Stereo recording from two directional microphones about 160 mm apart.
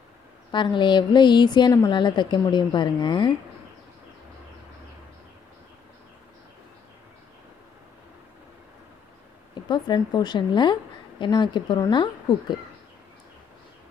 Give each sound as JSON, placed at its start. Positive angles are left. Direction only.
{"t": 0.5, "sound": "a woman's voice", "side_deg": 30}
{"t": 9.6, "sound": "a woman's voice", "side_deg": 25}